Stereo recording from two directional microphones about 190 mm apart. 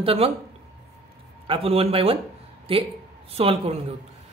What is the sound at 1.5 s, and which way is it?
A woman's voice, 30° right (ahead or behind).